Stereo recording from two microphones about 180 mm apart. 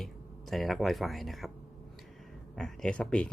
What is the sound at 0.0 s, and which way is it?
Speech, centre (ahead or behind).